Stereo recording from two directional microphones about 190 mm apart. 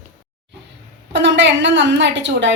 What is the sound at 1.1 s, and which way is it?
A woman's voice, 70° right (ahead or behind).